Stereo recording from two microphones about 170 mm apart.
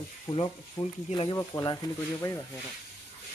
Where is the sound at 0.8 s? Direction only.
20° left (ahead or behind).